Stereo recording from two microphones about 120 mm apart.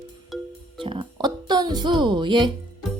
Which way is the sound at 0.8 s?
45° right (ahead or behind).